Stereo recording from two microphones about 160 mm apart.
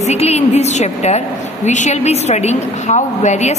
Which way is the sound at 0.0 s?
45° left (ahead or behind).